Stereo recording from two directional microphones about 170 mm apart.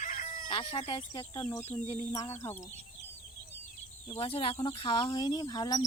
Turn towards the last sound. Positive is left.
turn(degrees=25)  # may be behind; listen again after turning